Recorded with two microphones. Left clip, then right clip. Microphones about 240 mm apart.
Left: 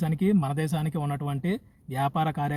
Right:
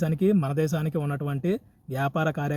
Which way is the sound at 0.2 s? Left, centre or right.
Centre.